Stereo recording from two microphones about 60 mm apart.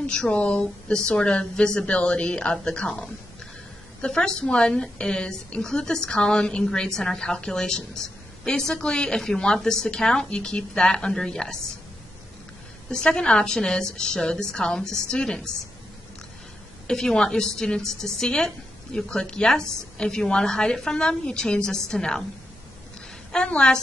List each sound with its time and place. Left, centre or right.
0.0 s a woman's voice: centre
12.9 s a woman's voice: centre
16.8 s a woman's voice: centre
23.3 s a woman's voice: centre